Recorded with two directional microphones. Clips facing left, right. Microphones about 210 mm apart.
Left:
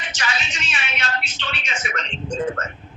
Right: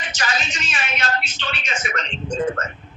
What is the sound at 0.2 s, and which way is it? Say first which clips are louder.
A man's voice: right 2 dB; 45° right (ahead or behind).